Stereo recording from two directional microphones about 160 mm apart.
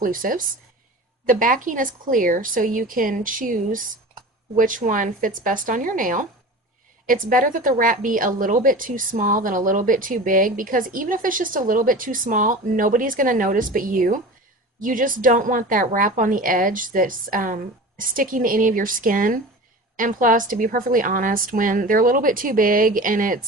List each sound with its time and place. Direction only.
0.0 s a woman's voice: 60° right (ahead or behind)